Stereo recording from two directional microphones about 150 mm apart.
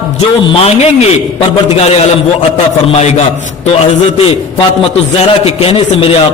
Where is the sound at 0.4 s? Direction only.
40° left (ahead or behind).